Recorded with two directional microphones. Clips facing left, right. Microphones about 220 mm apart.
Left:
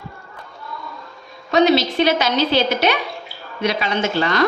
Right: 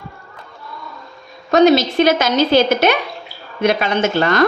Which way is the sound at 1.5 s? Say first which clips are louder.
Right 4 dB; 50° right (ahead or behind).